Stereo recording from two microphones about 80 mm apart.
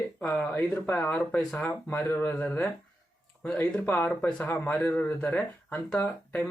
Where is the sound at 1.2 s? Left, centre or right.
Centre.